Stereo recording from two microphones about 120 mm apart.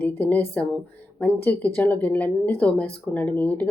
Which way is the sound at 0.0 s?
15° left (ahead or behind).